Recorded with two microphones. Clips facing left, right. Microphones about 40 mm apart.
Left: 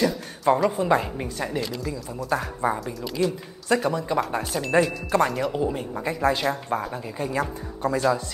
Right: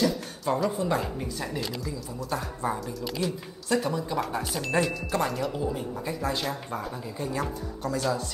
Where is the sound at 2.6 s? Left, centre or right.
Left.